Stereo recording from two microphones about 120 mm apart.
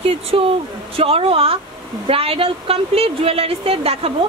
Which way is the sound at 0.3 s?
50° right (ahead or behind).